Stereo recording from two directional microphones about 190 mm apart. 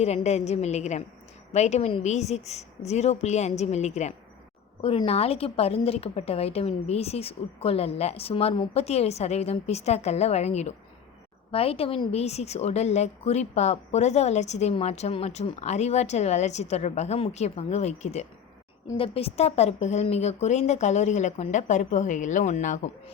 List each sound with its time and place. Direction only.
0.0 s a woman's voice: 35° left (ahead or behind)